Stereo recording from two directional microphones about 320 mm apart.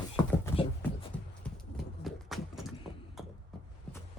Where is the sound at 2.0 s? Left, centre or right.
Centre.